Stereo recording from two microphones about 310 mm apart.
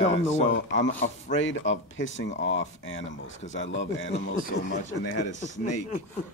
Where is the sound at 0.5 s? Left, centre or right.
Left.